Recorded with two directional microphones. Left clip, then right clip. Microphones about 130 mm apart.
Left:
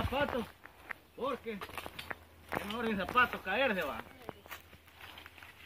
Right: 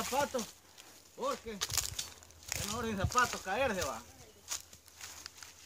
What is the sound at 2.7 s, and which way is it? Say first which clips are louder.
Speech: left 2 dB; 20° right (ahead or behind).